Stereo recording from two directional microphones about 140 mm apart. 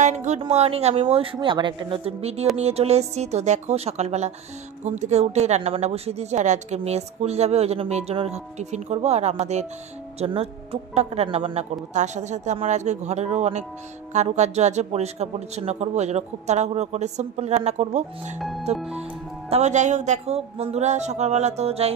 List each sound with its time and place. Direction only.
0.0 s speech: 60° right (ahead or behind)
0.5 s a woman's voice: 45° right (ahead or behind)
11.9 s a woman's voice: 60° right (ahead or behind)